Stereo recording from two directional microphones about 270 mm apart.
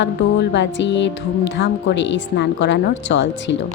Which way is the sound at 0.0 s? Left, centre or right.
Left.